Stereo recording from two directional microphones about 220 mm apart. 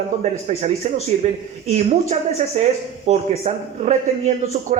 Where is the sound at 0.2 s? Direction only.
30° right (ahead or behind).